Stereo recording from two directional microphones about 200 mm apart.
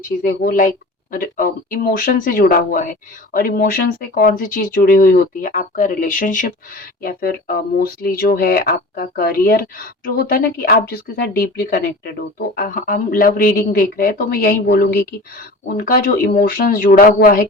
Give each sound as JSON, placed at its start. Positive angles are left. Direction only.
{"t": 0.0, "sound": "speech", "side_deg": 45}